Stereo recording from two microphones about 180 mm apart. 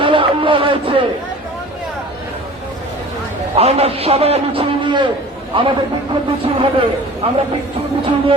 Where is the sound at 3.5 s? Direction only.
35° right (ahead or behind).